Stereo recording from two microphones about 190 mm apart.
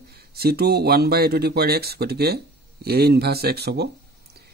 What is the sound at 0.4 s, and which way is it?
Speech, 55° right (ahead or behind).